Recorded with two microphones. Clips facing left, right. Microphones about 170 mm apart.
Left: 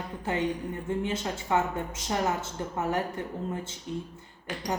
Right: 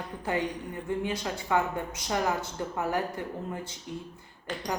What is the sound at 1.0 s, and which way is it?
Speech, 25° left (ahead or behind).